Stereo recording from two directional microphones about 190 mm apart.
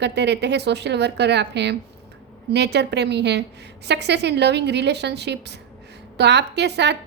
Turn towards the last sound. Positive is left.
turn(degrees=-65)  # may be behind; listen again after turning